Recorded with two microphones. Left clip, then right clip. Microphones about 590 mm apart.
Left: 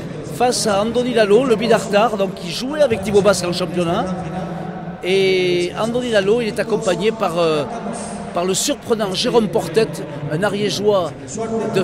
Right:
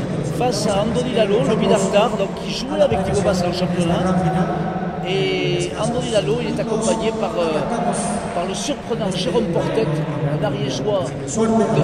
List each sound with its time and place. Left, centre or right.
0.4 s speech: left
5.1 s speech: left